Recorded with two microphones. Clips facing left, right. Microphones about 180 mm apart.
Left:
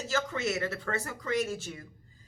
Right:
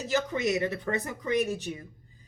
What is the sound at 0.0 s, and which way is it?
Speech, 15° right (ahead or behind).